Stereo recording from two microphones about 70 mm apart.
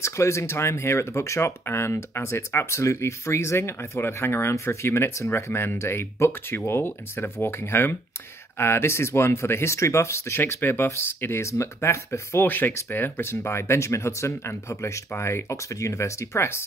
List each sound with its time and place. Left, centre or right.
0.0 s speech: left
10.4 s speech: left
12.4 s speech: left